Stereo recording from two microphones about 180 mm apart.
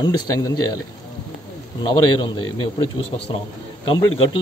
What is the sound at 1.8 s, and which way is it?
Speech, 25° left (ahead or behind).